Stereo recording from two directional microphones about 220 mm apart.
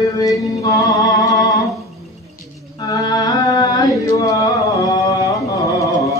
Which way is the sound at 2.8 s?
15° left (ahead or behind).